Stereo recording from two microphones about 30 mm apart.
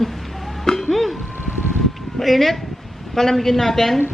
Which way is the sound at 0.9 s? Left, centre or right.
Centre.